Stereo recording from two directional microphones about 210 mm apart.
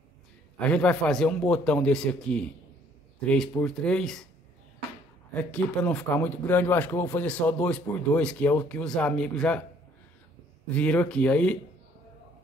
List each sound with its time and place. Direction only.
0.6 s a man's voice: 5° left (ahead or behind)
5.3 s speech: 5° left (ahead or behind)
10.7 s speech: 5° left (ahead or behind)